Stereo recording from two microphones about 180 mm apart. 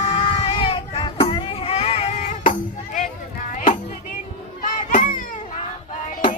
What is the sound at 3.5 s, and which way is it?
Music, 45° left (ahead or behind).